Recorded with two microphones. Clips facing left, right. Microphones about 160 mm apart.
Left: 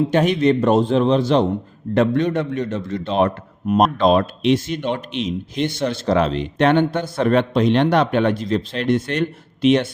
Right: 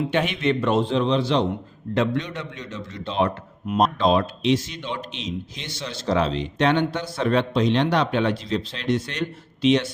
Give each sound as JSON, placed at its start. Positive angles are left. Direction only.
{"t": 0.1, "sound": "a man's voice", "side_deg": 40}